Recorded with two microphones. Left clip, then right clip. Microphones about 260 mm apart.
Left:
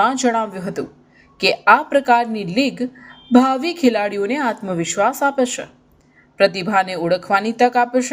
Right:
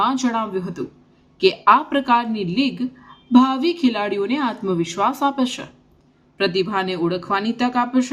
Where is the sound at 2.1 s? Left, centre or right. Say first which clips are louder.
Left 2 dB; centre.